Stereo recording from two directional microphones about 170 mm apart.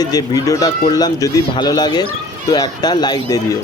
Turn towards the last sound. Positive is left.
turn(degrees=20)  # may be behind; listen again after turning